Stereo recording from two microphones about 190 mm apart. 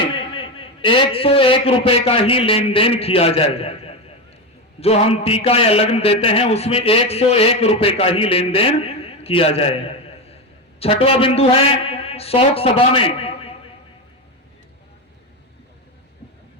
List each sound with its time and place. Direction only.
0.1 s a man's voice: 30° left (ahead or behind)